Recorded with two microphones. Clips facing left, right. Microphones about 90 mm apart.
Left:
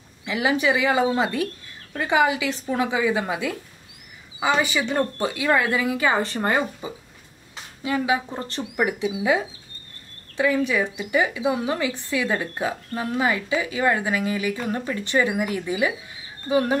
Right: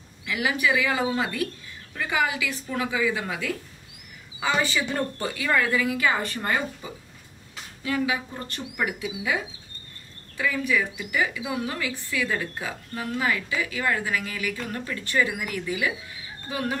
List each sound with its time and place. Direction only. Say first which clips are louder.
0.2 s speech: left 3 dB; 25° left (ahead or behind)